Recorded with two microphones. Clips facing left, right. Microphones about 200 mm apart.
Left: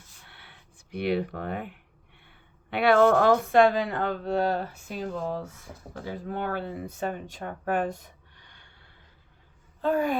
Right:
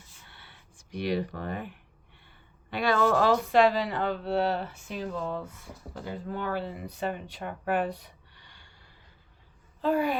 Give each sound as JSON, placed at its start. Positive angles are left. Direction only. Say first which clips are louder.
{"t": 0.3, "sound": "a sound", "louder": "left 1 dB", "side_deg": 60}
{"t": 2.2, "sound": "speech", "louder": "left 1 dB", "side_deg": 60}
{"t": 9.8, "sound": "speech", "louder": "left 1 dB", "side_deg": 45}